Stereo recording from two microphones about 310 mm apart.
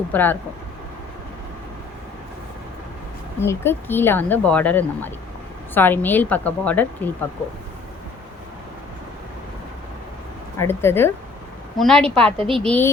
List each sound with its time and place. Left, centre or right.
0.1 s a woman's voice: centre
3.4 s a woman's voice: centre
10.6 s a woman's voice: centre
12.4 s a woman's voice: centre
12.6 s a woman's voice: centre